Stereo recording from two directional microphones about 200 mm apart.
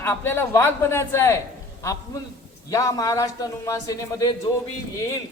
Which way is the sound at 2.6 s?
15° left (ahead or behind).